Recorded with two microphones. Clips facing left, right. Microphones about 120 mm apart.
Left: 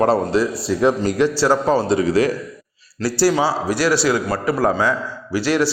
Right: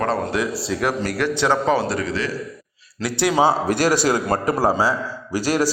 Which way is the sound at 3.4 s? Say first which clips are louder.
Right 1 dB; 50° right (ahead or behind).